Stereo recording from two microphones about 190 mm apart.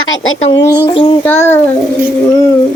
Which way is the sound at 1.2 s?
10° left (ahead or behind).